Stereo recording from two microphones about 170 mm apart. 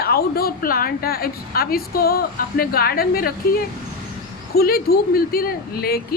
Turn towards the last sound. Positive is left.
turn(degrees=65)  # may be behind; listen again after turning